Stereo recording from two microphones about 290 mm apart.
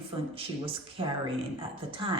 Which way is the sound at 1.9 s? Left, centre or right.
Centre.